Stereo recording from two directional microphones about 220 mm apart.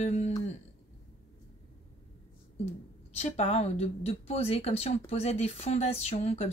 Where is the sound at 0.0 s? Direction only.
30° left (ahead or behind).